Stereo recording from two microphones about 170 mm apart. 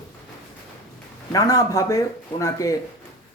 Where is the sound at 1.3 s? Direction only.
20° left (ahead or behind).